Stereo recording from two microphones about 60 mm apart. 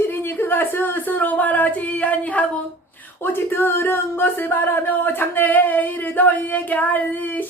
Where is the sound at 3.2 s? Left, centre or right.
Left.